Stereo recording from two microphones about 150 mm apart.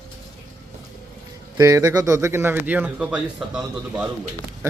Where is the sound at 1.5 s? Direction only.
20° right (ahead or behind); by 4.0 s 5° right (ahead or behind).